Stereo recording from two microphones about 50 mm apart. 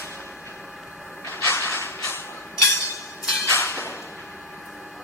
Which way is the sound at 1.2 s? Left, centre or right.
Left.